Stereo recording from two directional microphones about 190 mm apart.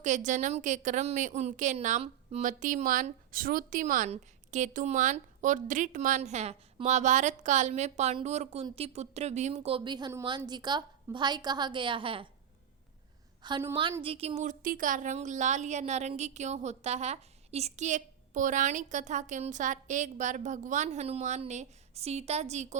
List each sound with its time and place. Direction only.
0.0 s a woman's voice: 40° right (ahead or behind)
13.4 s a woman's voice: 25° right (ahead or behind)